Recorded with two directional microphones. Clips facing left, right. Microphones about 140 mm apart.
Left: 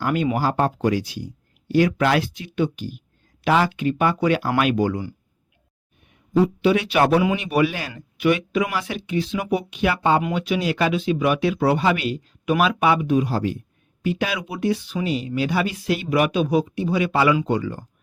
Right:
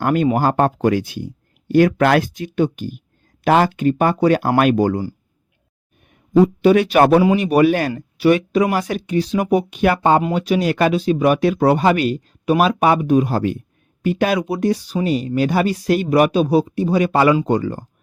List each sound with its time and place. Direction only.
0.0 s a man's voice: 45° right (ahead or behind)